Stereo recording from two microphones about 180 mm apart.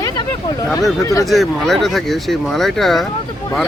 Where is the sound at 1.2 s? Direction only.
Centre (ahead or behind).